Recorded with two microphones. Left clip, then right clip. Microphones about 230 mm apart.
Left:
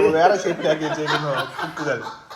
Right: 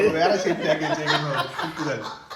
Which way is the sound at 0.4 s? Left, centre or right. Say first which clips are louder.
Left 1 dB; centre.